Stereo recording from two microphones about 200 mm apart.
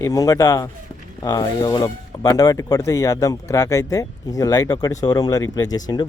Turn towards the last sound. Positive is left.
turn(degrees=20)  # may be behind; listen again after turning